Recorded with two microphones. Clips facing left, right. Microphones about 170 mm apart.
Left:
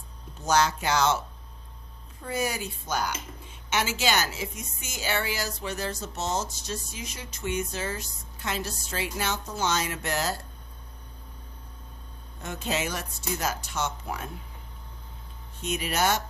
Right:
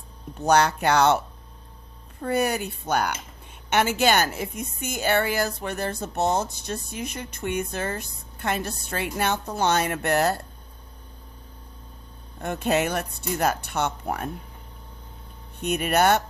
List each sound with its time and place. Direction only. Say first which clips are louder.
0.3 s a woman's voice: right 4 dB; 60° right (ahead or behind)
2.2 s a woman's voice: right 6 dB; 60° right (ahead or behind)
12.4 s a woman's voice: right 7 dB; 60° right (ahead or behind)
15.6 s a woman's voice: right 6 dB; 60° right (ahead or behind)